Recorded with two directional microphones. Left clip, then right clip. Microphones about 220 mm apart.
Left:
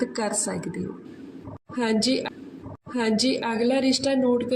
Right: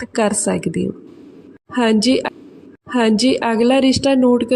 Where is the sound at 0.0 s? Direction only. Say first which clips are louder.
Right 8 dB; 40° right (ahead or behind).